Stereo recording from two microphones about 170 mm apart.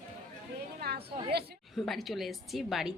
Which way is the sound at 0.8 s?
70° right (ahead or behind).